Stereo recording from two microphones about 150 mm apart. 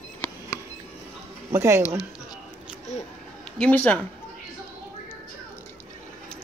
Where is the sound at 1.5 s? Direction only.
20° right (ahead or behind).